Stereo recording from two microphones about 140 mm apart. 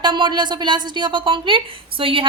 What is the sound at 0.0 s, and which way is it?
A woman's voice, 35° right (ahead or behind).